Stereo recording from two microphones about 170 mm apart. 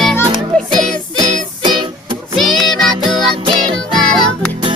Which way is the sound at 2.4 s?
Centre (ahead or behind).